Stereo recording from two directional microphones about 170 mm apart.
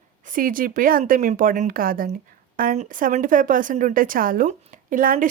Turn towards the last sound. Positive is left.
turn(degrees=-55)  # may be behind; listen again after turning